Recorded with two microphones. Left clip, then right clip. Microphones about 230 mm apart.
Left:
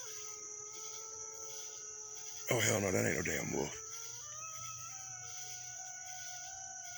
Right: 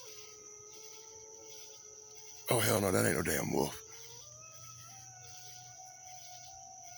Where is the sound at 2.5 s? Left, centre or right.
Centre.